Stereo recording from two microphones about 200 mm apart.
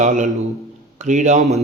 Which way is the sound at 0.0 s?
40° right (ahead or behind).